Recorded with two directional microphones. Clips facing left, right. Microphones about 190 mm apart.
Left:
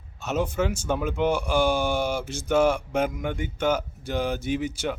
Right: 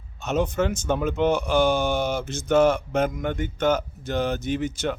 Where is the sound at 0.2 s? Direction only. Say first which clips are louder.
Right 2 dB; 5° left (ahead or behind).